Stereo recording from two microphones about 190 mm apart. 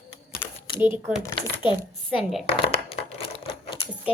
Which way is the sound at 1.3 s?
25° left (ahead or behind).